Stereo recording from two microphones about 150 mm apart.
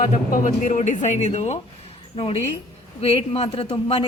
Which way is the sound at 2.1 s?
35° left (ahead or behind).